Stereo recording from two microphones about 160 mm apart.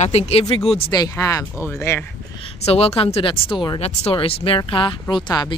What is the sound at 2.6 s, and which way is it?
A woman's voice, 40° left (ahead or behind).